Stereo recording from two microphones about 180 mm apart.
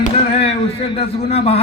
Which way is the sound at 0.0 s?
35° left (ahead or behind).